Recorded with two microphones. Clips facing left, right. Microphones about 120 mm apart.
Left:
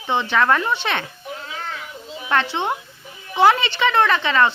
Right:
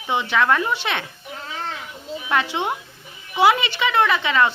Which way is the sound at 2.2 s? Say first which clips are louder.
Left 1 dB; 10° right (ahead or behind).